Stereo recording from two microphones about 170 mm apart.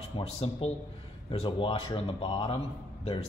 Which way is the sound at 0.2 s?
35° left (ahead or behind).